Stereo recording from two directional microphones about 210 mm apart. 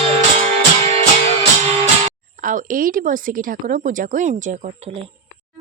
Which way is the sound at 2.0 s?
40° right (ahead or behind).